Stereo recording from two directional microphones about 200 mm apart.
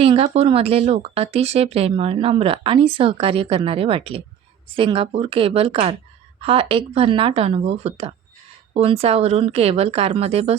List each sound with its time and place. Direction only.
0.0 s a woman's voice: 30° right (ahead or behind)